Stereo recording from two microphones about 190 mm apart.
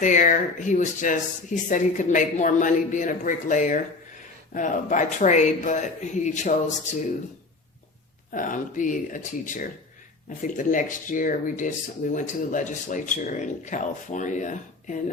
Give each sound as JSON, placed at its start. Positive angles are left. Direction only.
{"t": 0.0, "sound": "speech", "side_deg": 40}
{"t": 8.3, "sound": "speech", "side_deg": 45}